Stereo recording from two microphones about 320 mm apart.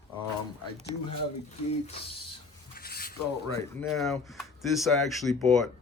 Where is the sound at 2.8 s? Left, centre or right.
Left.